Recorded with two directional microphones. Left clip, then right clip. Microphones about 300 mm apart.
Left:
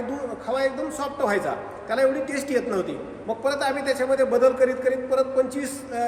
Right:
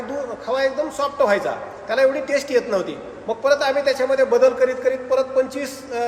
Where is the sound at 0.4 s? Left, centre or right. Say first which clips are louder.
Right 4 dB; centre.